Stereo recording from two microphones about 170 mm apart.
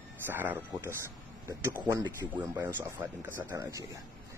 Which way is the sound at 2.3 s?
15° right (ahead or behind).